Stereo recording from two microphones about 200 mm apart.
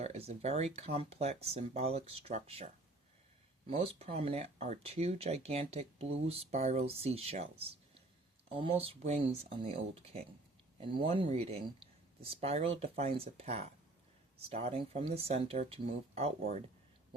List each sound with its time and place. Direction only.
0.0 s speech: 30° right (ahead or behind)